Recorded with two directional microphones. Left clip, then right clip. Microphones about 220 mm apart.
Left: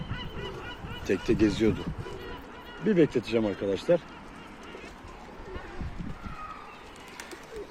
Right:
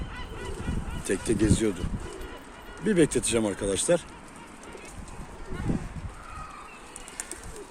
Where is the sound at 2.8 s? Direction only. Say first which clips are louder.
Right 1 dB; 5° right (ahead or behind).